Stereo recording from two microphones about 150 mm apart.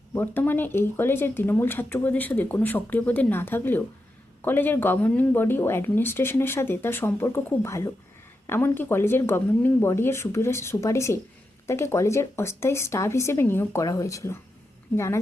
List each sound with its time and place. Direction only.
0.1 s speech: 15° left (ahead or behind)